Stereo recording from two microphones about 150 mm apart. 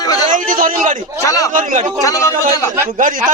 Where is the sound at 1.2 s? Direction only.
20° left (ahead or behind).